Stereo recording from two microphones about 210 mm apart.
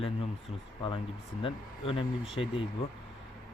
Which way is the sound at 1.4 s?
25° left (ahead or behind).